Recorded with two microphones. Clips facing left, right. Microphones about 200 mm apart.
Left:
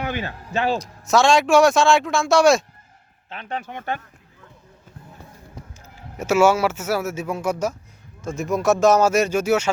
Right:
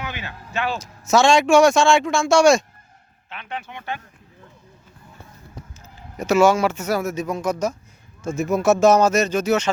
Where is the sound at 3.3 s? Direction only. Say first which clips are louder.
Left 3 dB; 40° left (ahead or behind).